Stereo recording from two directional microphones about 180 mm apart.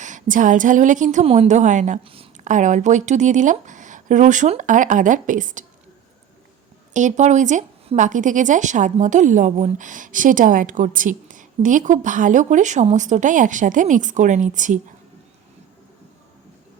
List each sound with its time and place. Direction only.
0.0 s speech: 45° right (ahead or behind)
6.9 s speech: 40° right (ahead or behind)